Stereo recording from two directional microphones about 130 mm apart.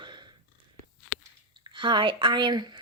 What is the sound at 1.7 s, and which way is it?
Speech, 35° right (ahead or behind).